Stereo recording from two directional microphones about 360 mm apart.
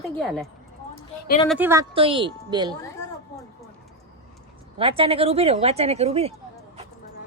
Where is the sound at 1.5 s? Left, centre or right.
Centre.